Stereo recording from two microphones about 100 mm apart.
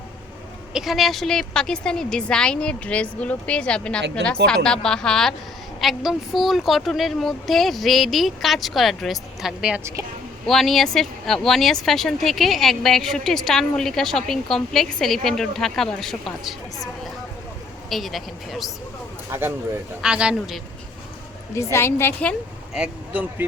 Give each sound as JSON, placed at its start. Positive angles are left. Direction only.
{"t": 0.7, "sound": "a woman's voice", "side_deg": -5}
{"t": 10.4, "sound": "speech", "side_deg": 0}
{"t": 19.3, "sound": "speech", "side_deg": -25}
{"t": 20.0, "sound": "speech", "side_deg": -10}
{"t": 21.5, "sound": "a woman's voice", "side_deg": 25}
{"t": 22.7, "sound": "speech", "side_deg": -5}
{"t": 23.4, "sound": "speech", "side_deg": -20}